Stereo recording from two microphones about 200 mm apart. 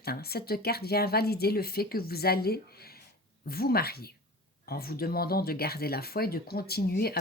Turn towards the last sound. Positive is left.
turn(degrees=50)  # may be behind; listen again after turning